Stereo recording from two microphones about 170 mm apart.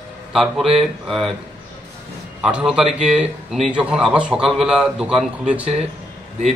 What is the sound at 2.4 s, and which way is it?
A man's voice, 5° right (ahead or behind).